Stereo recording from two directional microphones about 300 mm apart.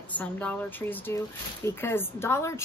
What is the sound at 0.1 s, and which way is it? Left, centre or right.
A woman's voice, centre.